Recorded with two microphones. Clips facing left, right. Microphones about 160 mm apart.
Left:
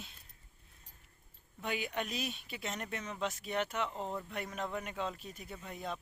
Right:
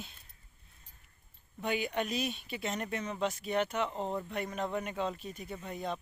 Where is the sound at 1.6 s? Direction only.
Centre (ahead or behind).